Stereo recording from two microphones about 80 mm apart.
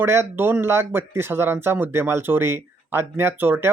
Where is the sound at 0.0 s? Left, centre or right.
Right.